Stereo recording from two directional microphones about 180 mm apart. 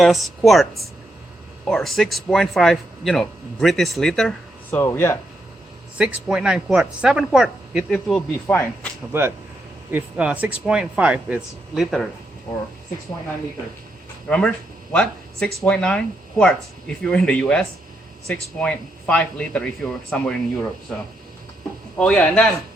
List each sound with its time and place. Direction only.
0.0 s speech: centre (ahead or behind)
4.7 s speech: 15° left (ahead or behind)
6.0 s speech: 5° right (ahead or behind)
9.9 s speech: 5° right (ahead or behind)
14.3 s speech: 5° left (ahead or behind)